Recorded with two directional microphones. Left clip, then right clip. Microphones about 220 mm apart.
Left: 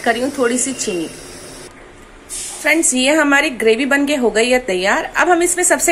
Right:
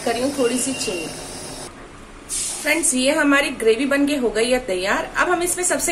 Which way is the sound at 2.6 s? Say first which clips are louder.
Left 5 dB; 25° left (ahead or behind).